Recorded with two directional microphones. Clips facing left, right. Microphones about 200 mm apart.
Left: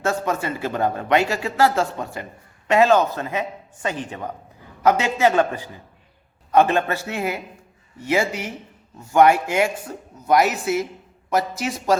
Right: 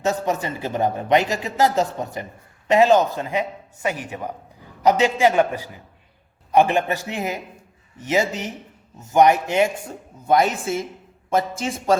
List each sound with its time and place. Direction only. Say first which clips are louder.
0.0 s a man's voice: right 1 dB; 20° right (ahead or behind)